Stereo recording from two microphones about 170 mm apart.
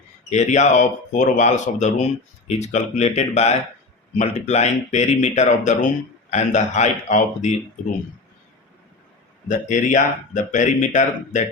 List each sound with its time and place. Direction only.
0.3 s speech: 40° left (ahead or behind)
9.5 s speech: 45° left (ahead or behind)